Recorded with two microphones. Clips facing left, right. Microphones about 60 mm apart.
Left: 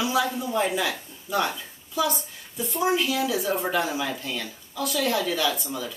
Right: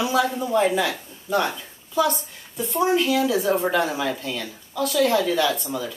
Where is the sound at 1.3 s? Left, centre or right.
Centre.